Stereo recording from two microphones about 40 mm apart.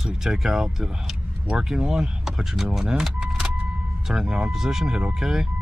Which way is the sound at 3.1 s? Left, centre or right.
Centre.